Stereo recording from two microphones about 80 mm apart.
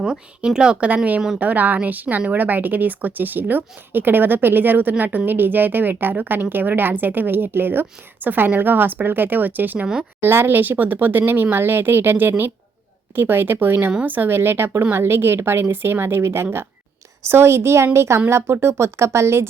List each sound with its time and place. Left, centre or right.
0.0 s a woman's voice: centre
9.8 s speech: centre
10.2 s a woman's voice: right